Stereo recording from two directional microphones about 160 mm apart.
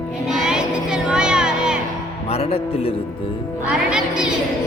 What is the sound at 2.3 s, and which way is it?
Speech, 40° left (ahead or behind).